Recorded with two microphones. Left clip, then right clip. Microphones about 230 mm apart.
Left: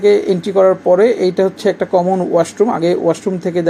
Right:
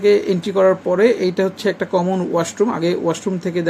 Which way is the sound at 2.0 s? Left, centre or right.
Right.